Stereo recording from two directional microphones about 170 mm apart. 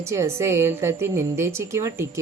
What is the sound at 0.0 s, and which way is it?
A woman's voice, 15° right (ahead or behind).